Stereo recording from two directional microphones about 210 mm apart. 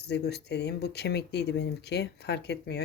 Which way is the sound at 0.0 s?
55° left (ahead or behind).